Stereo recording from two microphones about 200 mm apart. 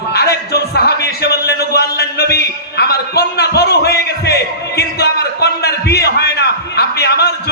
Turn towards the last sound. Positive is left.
turn(degrees=55)  # may be behind; listen again after turning